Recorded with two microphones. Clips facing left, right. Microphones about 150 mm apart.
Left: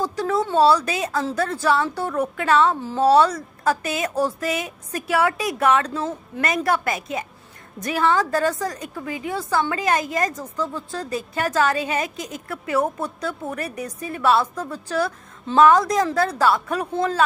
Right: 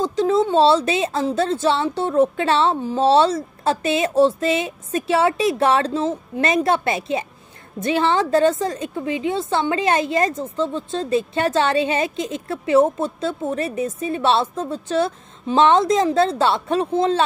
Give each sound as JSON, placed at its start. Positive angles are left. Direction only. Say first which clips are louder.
{"t": 0.0, "sound": "a woman's voice", "louder": "right 5 dB", "side_deg": -20}